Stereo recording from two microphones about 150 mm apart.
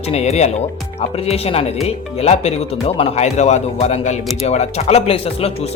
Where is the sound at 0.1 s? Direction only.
45° left (ahead or behind).